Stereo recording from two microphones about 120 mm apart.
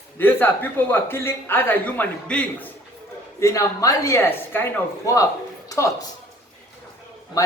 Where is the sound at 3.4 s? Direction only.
25° left (ahead or behind).